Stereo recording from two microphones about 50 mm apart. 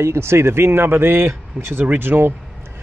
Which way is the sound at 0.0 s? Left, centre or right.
Right.